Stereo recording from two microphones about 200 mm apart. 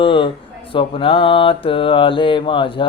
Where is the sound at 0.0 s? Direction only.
25° left (ahead or behind).